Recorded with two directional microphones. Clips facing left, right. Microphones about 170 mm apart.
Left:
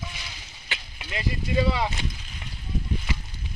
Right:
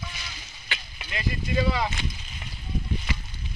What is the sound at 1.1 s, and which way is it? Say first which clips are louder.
Speech: left 1 dB; 25° left (ahead or behind).